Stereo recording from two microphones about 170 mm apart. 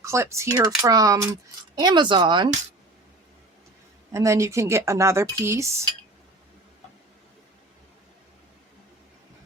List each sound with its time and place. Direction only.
0.0 s speech: 15° right (ahead or behind)
4.1 s speech: 15° right (ahead or behind)